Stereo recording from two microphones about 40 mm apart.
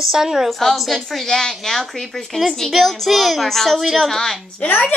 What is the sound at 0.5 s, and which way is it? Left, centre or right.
A child's voice, centre.